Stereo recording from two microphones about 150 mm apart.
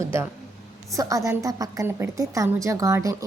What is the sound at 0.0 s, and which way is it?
A woman's voice, 20° right (ahead or behind).